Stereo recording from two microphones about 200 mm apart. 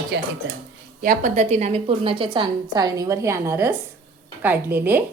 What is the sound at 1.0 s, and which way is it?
A woman's voice, 40° right (ahead or behind).